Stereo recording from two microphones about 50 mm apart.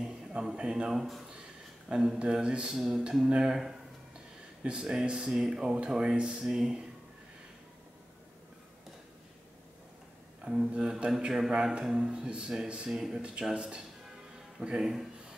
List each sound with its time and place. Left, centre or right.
0.0 s speech: centre
0.9 s speech: centre
10.4 s speech: centre